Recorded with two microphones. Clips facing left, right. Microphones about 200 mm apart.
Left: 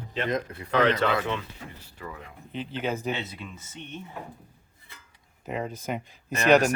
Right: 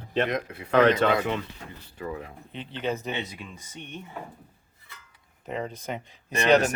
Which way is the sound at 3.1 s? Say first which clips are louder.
Even; 15° right (ahead or behind).